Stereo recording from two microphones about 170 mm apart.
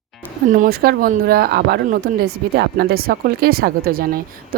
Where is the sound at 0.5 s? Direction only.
60° right (ahead or behind).